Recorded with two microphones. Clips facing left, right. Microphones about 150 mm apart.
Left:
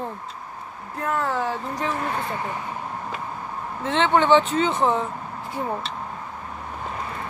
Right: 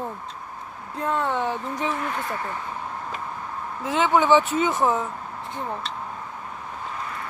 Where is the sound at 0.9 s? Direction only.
25° right (ahead or behind).